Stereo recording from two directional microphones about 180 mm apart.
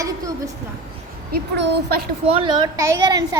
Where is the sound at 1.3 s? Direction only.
60° right (ahead or behind).